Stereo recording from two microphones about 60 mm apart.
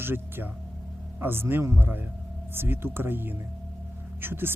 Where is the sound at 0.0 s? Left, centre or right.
Right.